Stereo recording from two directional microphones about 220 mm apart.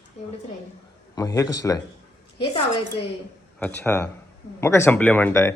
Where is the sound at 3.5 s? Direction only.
10° left (ahead or behind).